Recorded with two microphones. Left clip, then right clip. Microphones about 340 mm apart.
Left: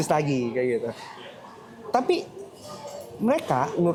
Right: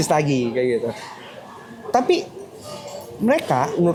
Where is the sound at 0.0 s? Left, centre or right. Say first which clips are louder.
Right 5 dB; left.